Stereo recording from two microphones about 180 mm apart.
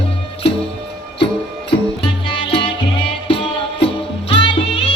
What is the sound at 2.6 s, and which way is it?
Music, 70° left (ahead or behind).